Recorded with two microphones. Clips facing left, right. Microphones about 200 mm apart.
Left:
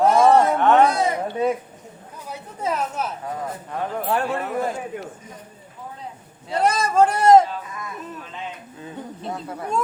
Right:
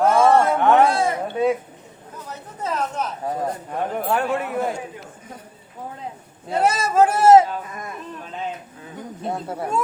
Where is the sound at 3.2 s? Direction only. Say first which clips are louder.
Right 4 dB; 30° right (ahead or behind).